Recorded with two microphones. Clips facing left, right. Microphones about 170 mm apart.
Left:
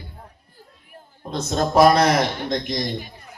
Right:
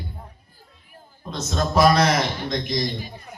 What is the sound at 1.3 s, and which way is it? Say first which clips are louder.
A man's voice: left 3 dB; 55° left (ahead or behind).